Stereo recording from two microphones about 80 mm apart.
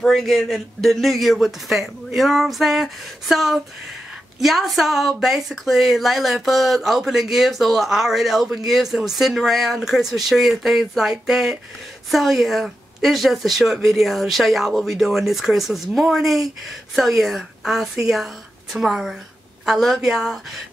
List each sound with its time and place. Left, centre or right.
0.0 s speech: centre